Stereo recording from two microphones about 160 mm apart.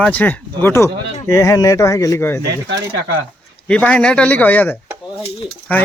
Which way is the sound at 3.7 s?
5° left (ahead or behind).